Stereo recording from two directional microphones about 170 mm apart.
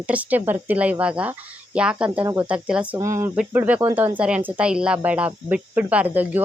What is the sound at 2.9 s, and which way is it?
Speech, 15° right (ahead or behind).